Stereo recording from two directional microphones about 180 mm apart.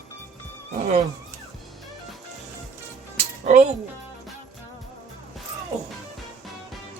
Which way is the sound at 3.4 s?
40° right (ahead or behind).